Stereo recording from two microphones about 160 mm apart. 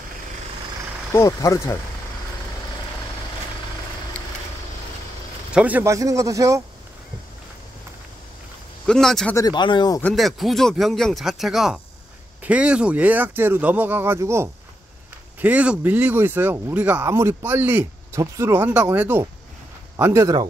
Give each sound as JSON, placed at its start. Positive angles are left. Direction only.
{"t": 1.1, "sound": "speech", "side_deg": 20}
{"t": 5.5, "sound": "a man's voice", "side_deg": -10}
{"t": 8.8, "sound": "speech", "side_deg": 5}
{"t": 9.3, "sound": "speech", "side_deg": 25}
{"t": 10.0, "sound": "speech", "side_deg": 0}